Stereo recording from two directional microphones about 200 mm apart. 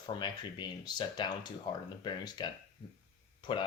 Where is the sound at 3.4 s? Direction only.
25° left (ahead or behind).